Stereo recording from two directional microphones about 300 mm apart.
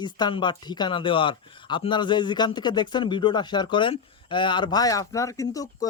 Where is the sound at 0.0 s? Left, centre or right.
Centre.